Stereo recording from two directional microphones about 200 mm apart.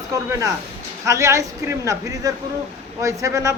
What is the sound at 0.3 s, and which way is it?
A man's voice, 15° right (ahead or behind).